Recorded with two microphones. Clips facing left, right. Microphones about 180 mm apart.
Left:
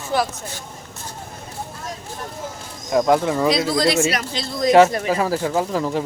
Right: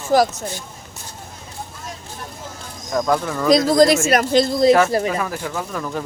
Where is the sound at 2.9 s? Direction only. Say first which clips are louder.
Left 3 dB; 20° left (ahead or behind).